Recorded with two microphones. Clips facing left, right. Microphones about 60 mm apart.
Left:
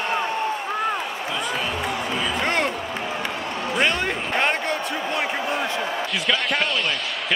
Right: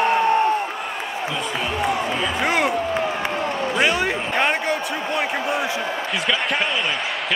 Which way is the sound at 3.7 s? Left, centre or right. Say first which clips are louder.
Right 1 dB; centre.